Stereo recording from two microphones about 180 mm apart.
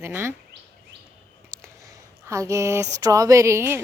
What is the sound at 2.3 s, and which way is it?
A woman's voice, 15° right (ahead or behind).